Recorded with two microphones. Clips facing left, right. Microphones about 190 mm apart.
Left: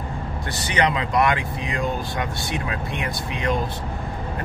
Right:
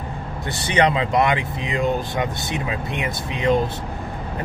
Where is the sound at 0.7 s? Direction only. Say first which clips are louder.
Right 4 dB; 30° right (ahead or behind).